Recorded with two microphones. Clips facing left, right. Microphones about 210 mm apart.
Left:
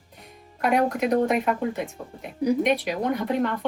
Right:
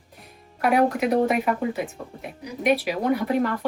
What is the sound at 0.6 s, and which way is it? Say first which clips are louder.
Speech: right 2 dB; 5° right (ahead or behind).